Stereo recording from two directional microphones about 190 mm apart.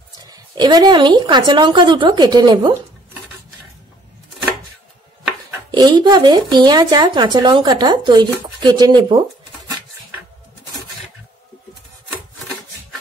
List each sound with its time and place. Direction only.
0.6 s speech: 20° right (ahead or behind)
5.7 s speech: 25° right (ahead or behind)